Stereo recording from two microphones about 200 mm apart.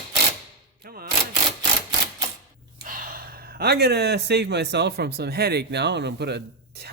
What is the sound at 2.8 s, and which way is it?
Speech, 45° right (ahead or behind).